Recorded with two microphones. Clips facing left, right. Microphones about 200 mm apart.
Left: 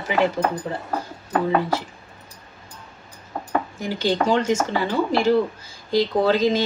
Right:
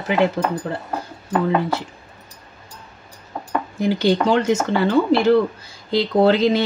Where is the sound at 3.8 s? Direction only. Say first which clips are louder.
Right 7 dB; 65° right (ahead or behind).